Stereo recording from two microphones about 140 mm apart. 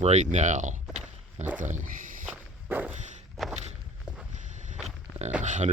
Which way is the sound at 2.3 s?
10° right (ahead or behind).